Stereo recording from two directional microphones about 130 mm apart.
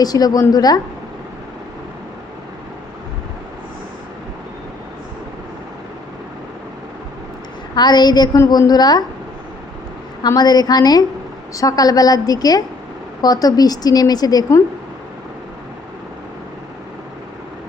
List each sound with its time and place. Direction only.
0.0 s a woman's voice: 30° left (ahead or behind)
7.8 s a woman's voice: 35° left (ahead or behind)
10.2 s a woman's voice: 30° left (ahead or behind)